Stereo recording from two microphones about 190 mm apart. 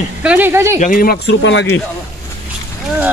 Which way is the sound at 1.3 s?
75° left (ahead or behind).